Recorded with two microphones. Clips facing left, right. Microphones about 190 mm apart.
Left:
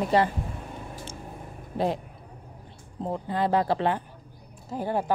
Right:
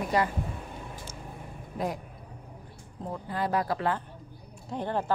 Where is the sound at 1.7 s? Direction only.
25° left (ahead or behind).